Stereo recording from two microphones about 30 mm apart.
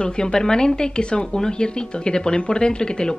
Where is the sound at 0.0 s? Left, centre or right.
Left.